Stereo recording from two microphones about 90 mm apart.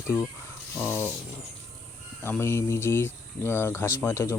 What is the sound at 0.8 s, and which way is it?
Speech, 25° left (ahead or behind).